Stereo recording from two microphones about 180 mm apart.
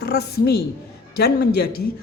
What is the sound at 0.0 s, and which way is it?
A woman's voice, 60° left (ahead or behind).